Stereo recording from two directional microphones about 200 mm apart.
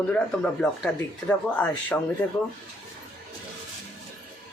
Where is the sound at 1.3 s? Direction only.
5° left (ahead or behind).